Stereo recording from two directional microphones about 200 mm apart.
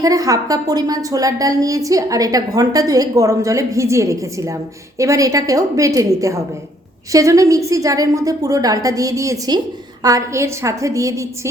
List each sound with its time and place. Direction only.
0.0 s a woman's voice: 15° right (ahead or behind)